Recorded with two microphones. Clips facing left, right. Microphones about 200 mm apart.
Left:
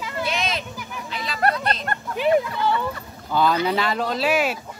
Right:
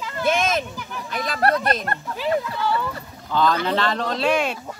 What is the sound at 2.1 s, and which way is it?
Speech, 20° left (ahead or behind).